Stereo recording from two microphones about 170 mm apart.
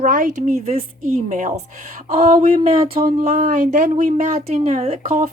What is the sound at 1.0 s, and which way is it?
Speech, 50° right (ahead or behind).